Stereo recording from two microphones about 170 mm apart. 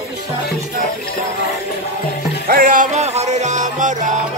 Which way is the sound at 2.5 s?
55° right (ahead or behind).